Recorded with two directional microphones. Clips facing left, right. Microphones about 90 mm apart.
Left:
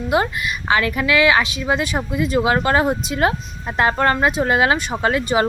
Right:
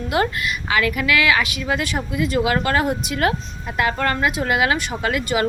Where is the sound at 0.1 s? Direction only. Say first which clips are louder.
Left 1 dB; 25° left (ahead or behind).